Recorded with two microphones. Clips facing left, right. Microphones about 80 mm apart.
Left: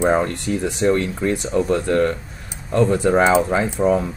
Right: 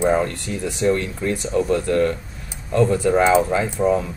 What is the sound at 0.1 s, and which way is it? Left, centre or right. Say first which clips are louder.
Speech: left 2 dB; left.